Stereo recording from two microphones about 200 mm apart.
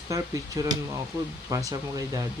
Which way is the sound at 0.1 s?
15° right (ahead or behind).